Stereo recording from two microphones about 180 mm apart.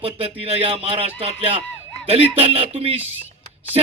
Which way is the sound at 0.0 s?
35° right (ahead or behind).